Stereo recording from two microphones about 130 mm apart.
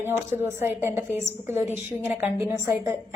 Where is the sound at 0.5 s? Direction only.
20° right (ahead or behind).